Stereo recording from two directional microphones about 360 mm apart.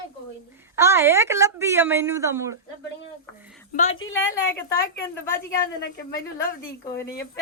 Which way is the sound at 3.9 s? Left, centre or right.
Left.